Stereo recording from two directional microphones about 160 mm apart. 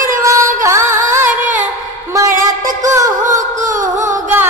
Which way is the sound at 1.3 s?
50° right (ahead or behind).